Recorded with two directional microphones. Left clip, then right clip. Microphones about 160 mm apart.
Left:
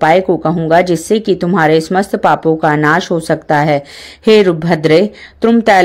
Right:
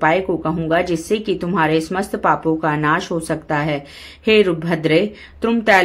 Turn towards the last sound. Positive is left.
turn(degrees=45)  # may be behind; listen again after turning